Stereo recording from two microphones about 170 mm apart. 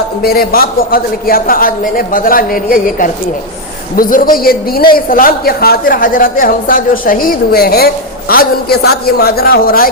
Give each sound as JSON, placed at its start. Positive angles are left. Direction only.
{"t": 0.2, "sound": "a woman's voice", "side_deg": 60}